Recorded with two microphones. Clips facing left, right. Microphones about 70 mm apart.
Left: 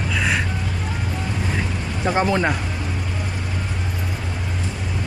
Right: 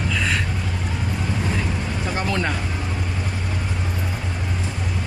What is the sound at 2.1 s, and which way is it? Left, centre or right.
Speech, left.